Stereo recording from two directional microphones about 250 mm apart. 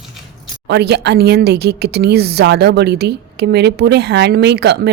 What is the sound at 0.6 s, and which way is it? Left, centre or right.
A woman's voice, right.